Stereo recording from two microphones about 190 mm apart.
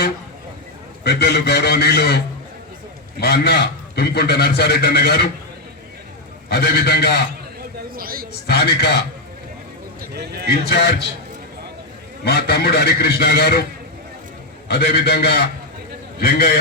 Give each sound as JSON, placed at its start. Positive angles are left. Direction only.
{"t": 1.0, "sound": "a man's voice", "side_deg": 60}
{"t": 6.5, "sound": "a man's voice", "side_deg": 60}
{"t": 7.9, "sound": "a man's voice", "side_deg": -50}
{"t": 8.4, "sound": "a man's voice", "side_deg": 60}
{"t": 10.0, "sound": "a man's voice", "side_deg": -60}
{"t": 10.7, "sound": "a man's voice", "side_deg": 55}
{"t": 12.2, "sound": "a man's voice", "side_deg": 55}
{"t": 14.7, "sound": "a man's voice", "side_deg": 60}